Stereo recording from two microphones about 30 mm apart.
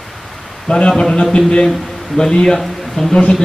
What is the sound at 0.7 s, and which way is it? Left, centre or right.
A man's voice, left.